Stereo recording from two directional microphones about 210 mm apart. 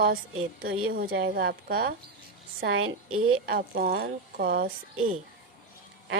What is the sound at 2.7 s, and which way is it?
Speech, 70° right (ahead or behind).